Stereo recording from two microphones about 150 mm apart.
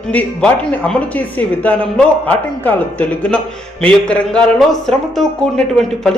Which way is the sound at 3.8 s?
10° left (ahead or behind).